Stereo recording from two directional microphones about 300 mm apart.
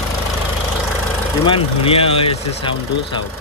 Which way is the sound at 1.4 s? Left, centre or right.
Centre.